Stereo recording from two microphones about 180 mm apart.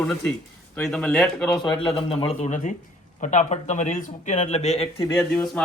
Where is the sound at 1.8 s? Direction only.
30° left (ahead or behind).